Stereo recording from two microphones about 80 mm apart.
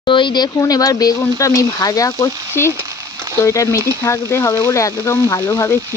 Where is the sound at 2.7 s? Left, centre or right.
Right.